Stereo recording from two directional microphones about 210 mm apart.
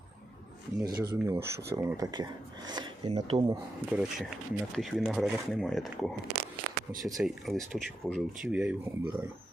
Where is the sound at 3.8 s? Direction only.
5° right (ahead or behind).